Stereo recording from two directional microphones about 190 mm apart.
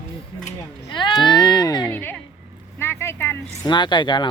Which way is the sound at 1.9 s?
10° left (ahead or behind).